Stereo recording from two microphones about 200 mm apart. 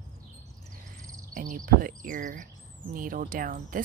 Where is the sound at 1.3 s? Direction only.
40° right (ahead or behind).